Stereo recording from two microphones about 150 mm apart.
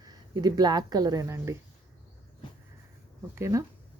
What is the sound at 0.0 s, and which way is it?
Speech, 25° right (ahead or behind).